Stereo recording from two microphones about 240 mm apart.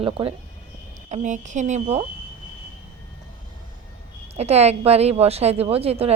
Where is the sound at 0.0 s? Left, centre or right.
Right.